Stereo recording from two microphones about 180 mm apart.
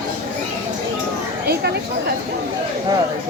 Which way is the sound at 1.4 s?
65° right (ahead or behind).